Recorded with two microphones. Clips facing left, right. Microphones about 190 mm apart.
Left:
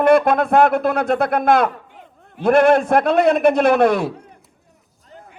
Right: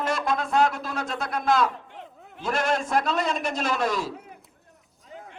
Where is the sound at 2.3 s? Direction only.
60° left (ahead or behind).